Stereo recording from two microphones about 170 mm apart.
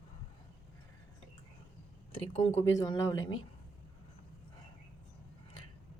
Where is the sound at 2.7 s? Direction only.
20° left (ahead or behind).